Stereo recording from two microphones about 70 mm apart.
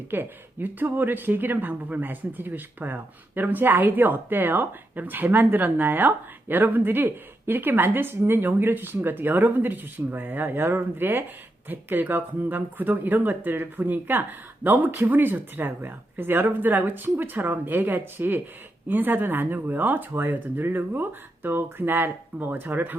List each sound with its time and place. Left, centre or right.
0.1 s speech: right